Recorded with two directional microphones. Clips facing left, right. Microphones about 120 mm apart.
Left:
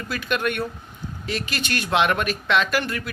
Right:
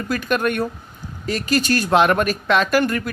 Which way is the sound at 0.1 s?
45° right (ahead or behind).